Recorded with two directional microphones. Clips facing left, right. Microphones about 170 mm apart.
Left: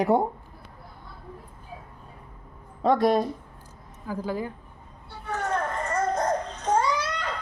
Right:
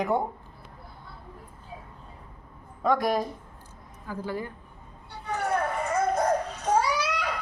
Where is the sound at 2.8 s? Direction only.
25° left (ahead or behind).